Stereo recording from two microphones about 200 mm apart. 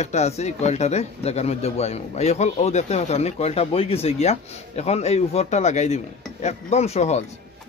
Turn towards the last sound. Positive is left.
turn(degrees=30)  # may be behind; listen again after turning